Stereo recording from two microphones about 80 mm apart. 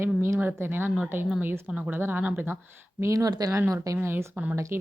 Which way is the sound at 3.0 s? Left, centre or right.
Right.